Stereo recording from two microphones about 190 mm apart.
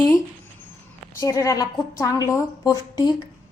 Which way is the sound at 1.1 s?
15° left (ahead or behind).